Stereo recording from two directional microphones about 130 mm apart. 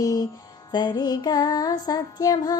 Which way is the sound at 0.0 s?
25° left (ahead or behind).